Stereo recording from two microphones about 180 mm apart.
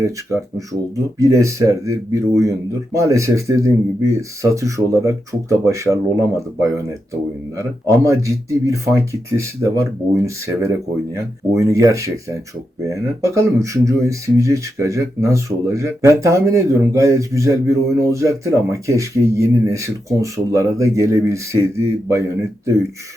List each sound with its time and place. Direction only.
0.0 s speech: 15° right (ahead or behind)